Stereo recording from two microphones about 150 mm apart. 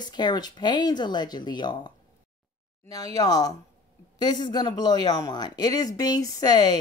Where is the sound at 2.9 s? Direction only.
25° left (ahead or behind).